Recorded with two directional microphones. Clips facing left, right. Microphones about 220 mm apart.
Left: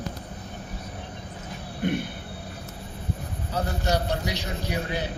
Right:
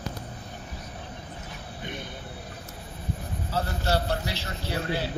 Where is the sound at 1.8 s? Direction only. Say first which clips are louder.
Left 12 dB; 55° left (ahead or behind).